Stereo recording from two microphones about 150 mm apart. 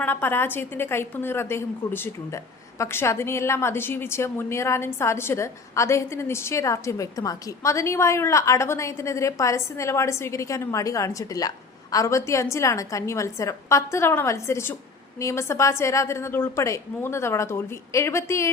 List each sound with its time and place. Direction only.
0.0 s a woman's voice: 15° left (ahead or behind)